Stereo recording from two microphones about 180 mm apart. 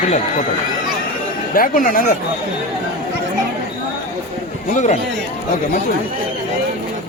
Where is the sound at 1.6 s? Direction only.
50° left (ahead or behind).